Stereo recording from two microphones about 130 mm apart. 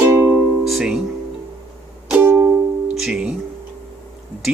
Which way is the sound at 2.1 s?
15° right (ahead or behind).